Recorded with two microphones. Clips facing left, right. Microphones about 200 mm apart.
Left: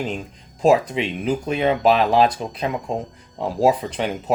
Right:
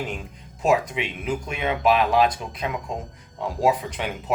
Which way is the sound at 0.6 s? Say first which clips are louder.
Left 5 dB; 30° left (ahead or behind).